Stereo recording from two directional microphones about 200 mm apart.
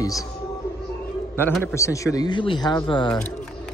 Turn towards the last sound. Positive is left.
turn(degrees=25)  # may be behind; listen again after turning